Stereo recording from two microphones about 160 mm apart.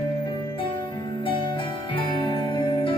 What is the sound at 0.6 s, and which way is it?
Music, 30° left (ahead or behind).